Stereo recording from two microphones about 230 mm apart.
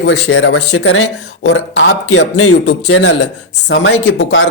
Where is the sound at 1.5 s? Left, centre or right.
Left.